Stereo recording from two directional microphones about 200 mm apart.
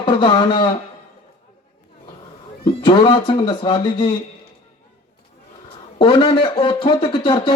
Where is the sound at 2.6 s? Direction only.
25° left (ahead or behind).